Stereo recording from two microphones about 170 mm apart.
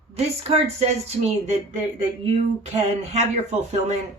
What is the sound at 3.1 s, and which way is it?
Speech, 40° right (ahead or behind).